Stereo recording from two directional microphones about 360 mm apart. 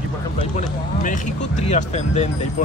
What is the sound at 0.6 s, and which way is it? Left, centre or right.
Speech, centre.